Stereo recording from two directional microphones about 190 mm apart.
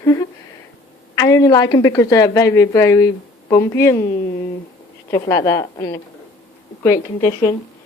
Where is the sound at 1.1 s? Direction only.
15° left (ahead or behind).